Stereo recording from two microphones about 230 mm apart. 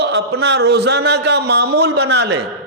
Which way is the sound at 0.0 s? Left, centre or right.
Right.